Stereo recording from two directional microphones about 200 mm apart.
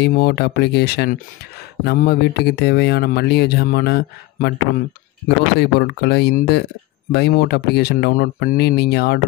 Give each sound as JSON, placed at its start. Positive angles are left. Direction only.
{"t": 0.0, "sound": "speech", "side_deg": 50}